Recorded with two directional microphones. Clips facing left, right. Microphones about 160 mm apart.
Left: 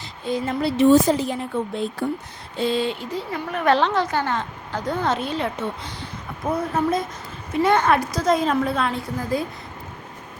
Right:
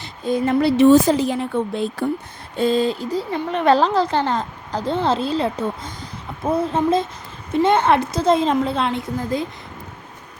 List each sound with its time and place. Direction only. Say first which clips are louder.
0.3 s a woman's voice: right 6 dB; 60° right (ahead or behind); by 1.5 s 90° right
2.6 s a woman's voice: right 4 dB; 45° right (ahead or behind)
3.3 s a woman's voice: right 3 dB; 25° right (ahead or behind)
3.8 s a woman's voice: right 3 dB; 35° right (ahead or behind)
6.4 s a woman's voice: right 3 dB; 25° right (ahead or behind)